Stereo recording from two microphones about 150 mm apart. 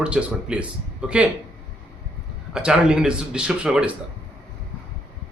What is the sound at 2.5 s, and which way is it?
Speech, 5° right (ahead or behind).